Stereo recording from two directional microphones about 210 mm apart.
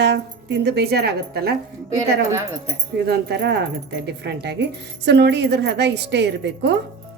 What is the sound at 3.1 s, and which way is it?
A woman's voice, 50° right (ahead or behind).